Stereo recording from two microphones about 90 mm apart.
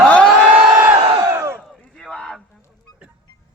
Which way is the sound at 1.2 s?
30° right (ahead or behind).